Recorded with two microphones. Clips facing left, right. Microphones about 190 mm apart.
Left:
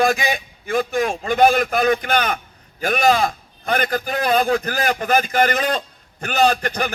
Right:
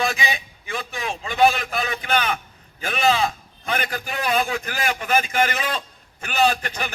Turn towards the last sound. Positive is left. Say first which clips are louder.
# left 4 dB
turn(degrees=45)  # may be behind; listen again after turning